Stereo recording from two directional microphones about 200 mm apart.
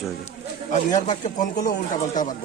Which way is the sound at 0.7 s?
35° left (ahead or behind).